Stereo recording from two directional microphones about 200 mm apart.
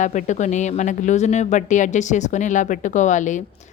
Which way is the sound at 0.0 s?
40° left (ahead or behind).